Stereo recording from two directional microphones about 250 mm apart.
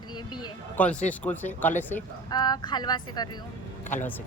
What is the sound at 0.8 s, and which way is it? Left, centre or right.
A woman's voice, centre.